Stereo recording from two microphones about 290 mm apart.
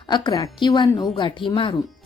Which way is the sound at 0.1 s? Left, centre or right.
Centre.